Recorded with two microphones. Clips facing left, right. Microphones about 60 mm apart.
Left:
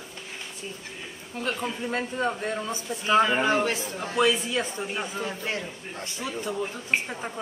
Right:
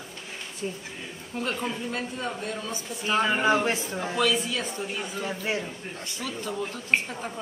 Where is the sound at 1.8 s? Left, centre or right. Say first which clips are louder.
Left 4 dB; left.